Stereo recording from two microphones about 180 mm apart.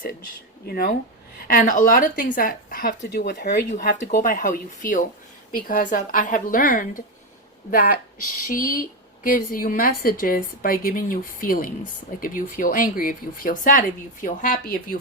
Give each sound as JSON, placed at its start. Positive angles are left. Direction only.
{"t": 0.7, "sound": "a woman's voice", "side_deg": 55}
{"t": 3.7, "sound": "a woman's voice", "side_deg": 50}